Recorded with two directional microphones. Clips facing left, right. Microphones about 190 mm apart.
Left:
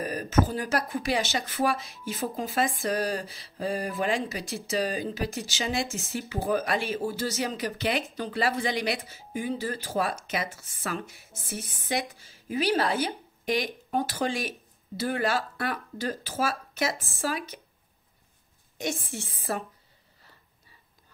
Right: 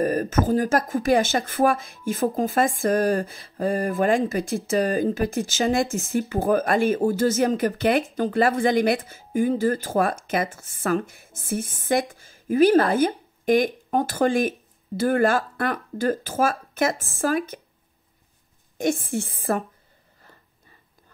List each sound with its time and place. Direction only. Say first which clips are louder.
0.0 s speech: right 4 dB; 50° right (ahead or behind)
18.8 s speech: right 9 dB; 50° right (ahead or behind)